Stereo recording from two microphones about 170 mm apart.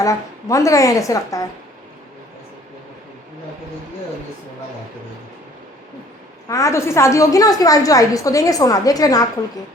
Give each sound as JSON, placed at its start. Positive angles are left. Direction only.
{"t": 0.0, "sound": "a woman's voice", "side_deg": 20}
{"t": 6.5, "sound": "a woman's voice", "side_deg": 15}